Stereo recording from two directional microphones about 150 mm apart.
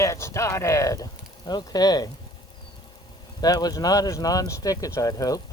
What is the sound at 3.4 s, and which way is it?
Speech, 25° left (ahead or behind).